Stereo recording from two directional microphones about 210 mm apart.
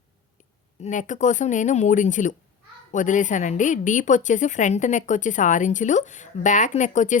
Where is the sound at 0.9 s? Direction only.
35° left (ahead or behind).